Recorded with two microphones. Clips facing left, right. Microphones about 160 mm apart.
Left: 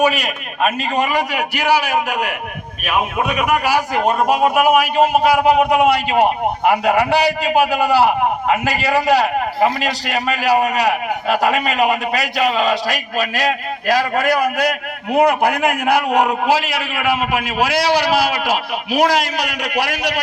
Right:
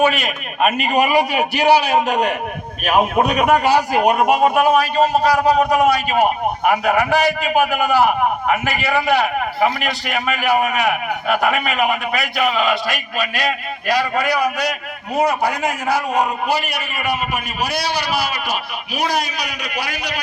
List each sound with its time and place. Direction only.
0.0 s a man's voice: 5° left (ahead or behind)
0.9 s a man's voice: 15° right (ahead or behind)
4.4 s a man's voice: 5° left (ahead or behind); by 20.1 s 90° left